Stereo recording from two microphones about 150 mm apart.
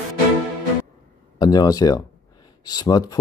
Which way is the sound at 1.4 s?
25° left (ahead or behind).